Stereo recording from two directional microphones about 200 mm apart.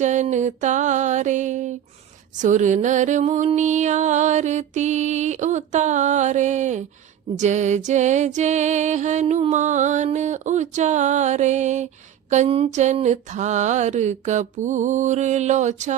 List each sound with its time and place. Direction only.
0.0 s music: 35° right (ahead or behind)